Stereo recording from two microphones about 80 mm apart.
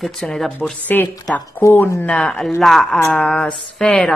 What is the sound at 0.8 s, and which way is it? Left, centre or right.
Speech, left.